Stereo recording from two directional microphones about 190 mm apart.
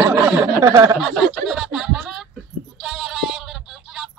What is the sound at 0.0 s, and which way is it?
Snicker, 15° right (ahead or behind).